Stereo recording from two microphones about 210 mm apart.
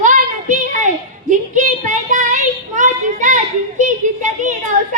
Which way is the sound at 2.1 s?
35° right (ahead or behind).